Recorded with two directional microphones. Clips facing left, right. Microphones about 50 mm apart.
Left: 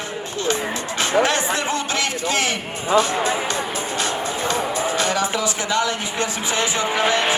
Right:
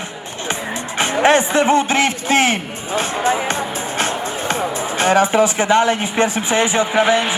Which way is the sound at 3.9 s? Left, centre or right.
Right.